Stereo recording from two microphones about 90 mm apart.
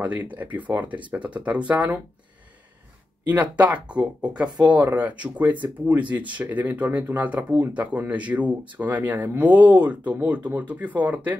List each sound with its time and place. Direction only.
0.0 s speech: 20° right (ahead or behind)
3.3 s speech: 15° right (ahead or behind)